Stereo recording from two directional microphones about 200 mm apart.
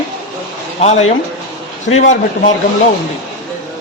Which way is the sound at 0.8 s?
35° left (ahead or behind).